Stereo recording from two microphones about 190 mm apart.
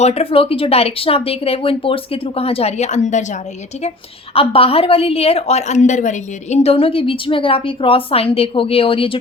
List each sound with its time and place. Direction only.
0.0 s a woman's voice: 35° left (ahead or behind)
4.4 s a woman's voice: 30° left (ahead or behind)